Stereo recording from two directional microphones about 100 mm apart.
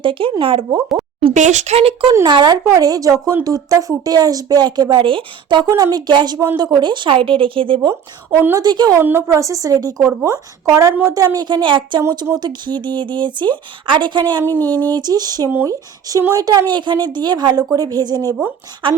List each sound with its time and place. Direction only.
0.0 s speech: 60° right (ahead or behind)
0.8 s speech: 5° right (ahead or behind)
1.2 s speech: 85° right
2.2 s speech: 45° right (ahead or behind)
2.6 s speech: 35° right (ahead or behind); by 7.8 s 60° right (ahead or behind)
8.3 s a woman's voice: 20° right (ahead or behind)
8.5 s speech: 45° right (ahead or behind)
8.9 s speech: 25° right (ahead or behind)
11.1 s speech: 35° right (ahead or behind); by 12.0 s 55° right (ahead or behind)
12.1 s speech: 40° right (ahead or behind)
14.4 s a sound: 20° left (ahead or behind)
14.9 s speech: 40° right (ahead or behind)
18.8 s speech: 55° right (ahead or behind)